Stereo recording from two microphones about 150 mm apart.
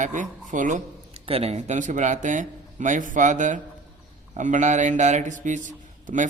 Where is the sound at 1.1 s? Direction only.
40° right (ahead or behind).